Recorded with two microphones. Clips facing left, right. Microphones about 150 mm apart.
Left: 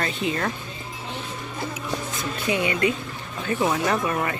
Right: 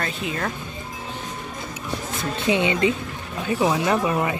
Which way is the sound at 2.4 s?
20° right (ahead or behind).